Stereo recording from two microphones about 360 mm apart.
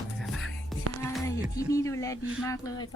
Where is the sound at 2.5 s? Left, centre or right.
Centre.